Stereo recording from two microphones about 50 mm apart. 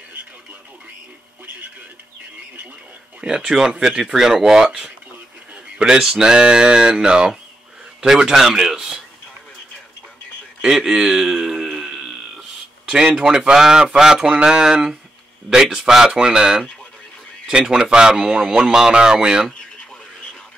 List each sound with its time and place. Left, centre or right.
3.2 s a man's voice: centre
10.6 s a sound: centre
13.2 s a man's voice: centre